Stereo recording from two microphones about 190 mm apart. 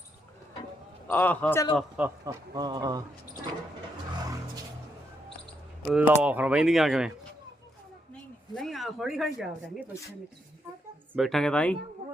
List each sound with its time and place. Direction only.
1.0 s a man's voice: 10° left (ahead or behind)
1.7 s speech: 10° right (ahead or behind)
2.2 s speech: 20° right (ahead or behind)
4.2 s music: 20° right (ahead or behind)
5.9 s speech: 10° right (ahead or behind)
8.5 s speech: centre (ahead or behind)
11.1 s speech: centre (ahead or behind)